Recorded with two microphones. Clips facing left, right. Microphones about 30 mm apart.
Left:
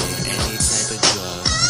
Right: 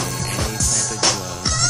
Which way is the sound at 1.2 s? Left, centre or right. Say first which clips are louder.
Left 2 dB; left.